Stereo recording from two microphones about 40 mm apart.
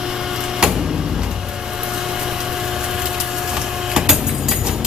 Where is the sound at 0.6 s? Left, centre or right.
Centre.